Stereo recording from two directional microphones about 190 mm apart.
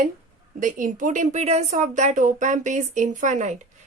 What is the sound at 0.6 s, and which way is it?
A woman's voice, 45° right (ahead or behind).